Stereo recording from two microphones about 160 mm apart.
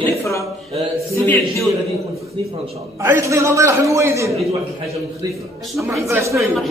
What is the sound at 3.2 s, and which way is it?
A man's voice, 20° right (ahead or behind).